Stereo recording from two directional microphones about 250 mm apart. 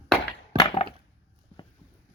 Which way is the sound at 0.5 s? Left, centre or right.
Left.